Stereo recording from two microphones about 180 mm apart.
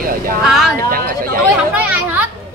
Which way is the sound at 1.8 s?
10° right (ahead or behind).